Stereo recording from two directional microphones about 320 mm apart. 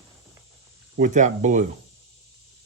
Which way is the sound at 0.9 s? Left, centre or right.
Right.